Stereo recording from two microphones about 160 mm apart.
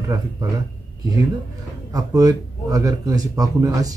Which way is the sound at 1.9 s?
25° right (ahead or behind).